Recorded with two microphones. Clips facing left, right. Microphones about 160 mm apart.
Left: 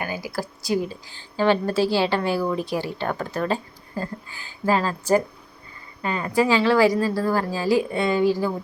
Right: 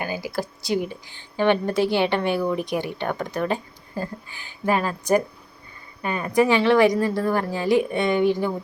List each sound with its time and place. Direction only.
0.0 s speech: 25° right (ahead or behind)